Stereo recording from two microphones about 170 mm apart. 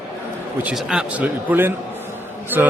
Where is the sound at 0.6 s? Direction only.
5° right (ahead or behind).